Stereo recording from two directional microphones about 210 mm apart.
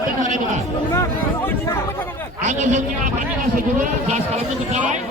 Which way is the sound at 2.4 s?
35° right (ahead or behind).